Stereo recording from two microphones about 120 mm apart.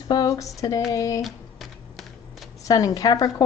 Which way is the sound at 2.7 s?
30° left (ahead or behind).